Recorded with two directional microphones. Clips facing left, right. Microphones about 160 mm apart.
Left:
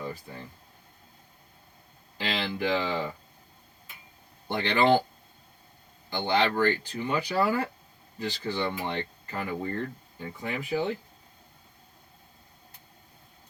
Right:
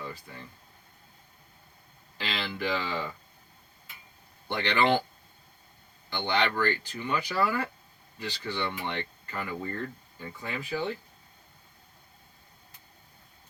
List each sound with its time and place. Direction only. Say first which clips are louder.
0.0 s a sound: left 4 dB; 15° left (ahead or behind)
2.1 s speech: left 3 dB; 20° left (ahead or behind)
4.5 s speech: left 2 dB; 25° left (ahead or behind)
6.1 s speech: left 3 dB; 25° left (ahead or behind)
8.4 s speech: left 2 dB; 40° left (ahead or behind)
9.0 s speech: left 2 dB; 20° left (ahead or behind)